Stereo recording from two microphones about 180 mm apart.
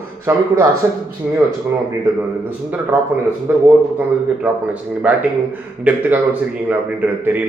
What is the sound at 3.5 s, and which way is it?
Speech, 10° right (ahead or behind).